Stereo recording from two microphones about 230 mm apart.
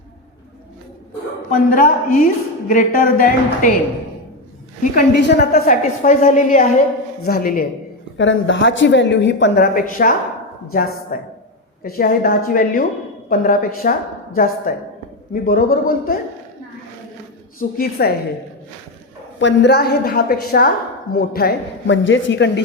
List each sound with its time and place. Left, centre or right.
1.5 s a woman's voice: left
4.8 s a woman's voice: left
8.2 s a woman's voice: left
9.7 s a woman's voice: left
17.6 s a woman's voice: left
19.4 s a woman's voice: left